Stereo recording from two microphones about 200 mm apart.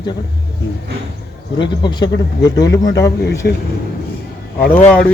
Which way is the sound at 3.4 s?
55° left (ahead or behind).